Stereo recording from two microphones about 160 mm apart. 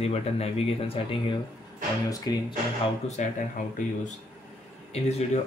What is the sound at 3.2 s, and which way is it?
Speech, 50° left (ahead or behind).